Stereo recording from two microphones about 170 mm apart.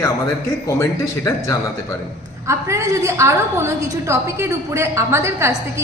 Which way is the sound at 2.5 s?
15° right (ahead or behind).